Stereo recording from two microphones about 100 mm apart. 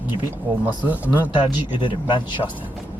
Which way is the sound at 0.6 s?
15° right (ahead or behind).